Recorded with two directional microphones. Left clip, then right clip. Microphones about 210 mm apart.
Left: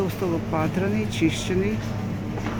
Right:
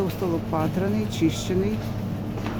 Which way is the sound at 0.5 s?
Centre (ahead or behind).